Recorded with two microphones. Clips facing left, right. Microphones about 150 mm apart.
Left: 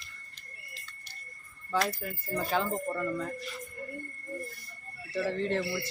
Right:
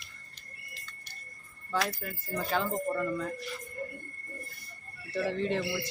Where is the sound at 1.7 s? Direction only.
5° left (ahead or behind).